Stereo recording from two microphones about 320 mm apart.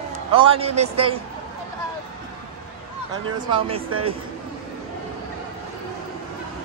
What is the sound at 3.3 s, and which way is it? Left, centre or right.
Speech, centre.